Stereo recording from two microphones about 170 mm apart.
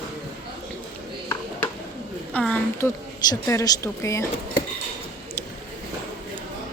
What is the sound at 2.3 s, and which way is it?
A woman's voice, 10° left (ahead or behind).